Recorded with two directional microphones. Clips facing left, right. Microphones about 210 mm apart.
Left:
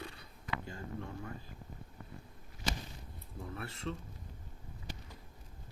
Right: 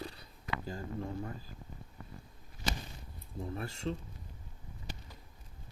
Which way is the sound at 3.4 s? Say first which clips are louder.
Right 4 dB; 30° right (ahead or behind).